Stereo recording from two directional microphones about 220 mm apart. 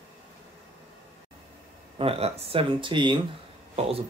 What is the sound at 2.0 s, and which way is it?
Speech, 25° right (ahead or behind).